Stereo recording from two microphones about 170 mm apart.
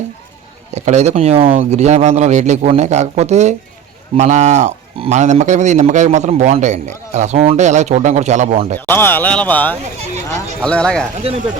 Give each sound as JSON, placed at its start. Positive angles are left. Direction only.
{"t": 0.7, "sound": "speech", "side_deg": -40}
{"t": 8.9, "sound": "speech", "side_deg": 10}
{"t": 11.3, "sound": "speech", "side_deg": -35}